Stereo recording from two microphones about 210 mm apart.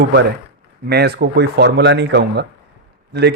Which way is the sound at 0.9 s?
50° right (ahead or behind).